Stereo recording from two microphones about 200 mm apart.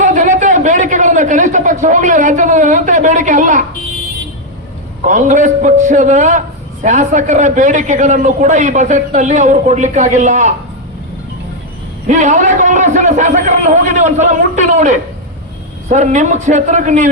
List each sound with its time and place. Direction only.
0.0 s a sound: 40° right (ahead or behind)
5.0 s a man's voice: 40° right (ahead or behind)
12.0 s a man's voice: 35° right (ahead or behind)